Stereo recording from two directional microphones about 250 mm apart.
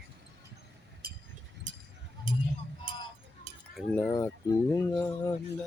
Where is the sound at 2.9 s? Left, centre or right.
Right.